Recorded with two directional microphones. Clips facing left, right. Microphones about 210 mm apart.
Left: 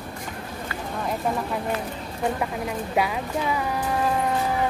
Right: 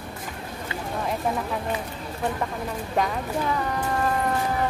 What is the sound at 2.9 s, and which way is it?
Speech, 10° left (ahead or behind).